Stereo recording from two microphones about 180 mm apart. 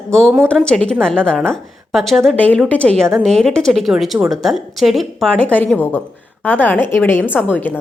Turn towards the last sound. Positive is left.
turn(degrees=10)  # may be behind; listen again after turning